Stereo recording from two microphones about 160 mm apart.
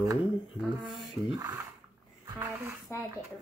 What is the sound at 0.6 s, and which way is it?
Speech, centre (ahead or behind).